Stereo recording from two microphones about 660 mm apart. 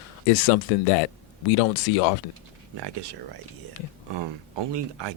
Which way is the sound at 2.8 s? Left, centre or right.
Right.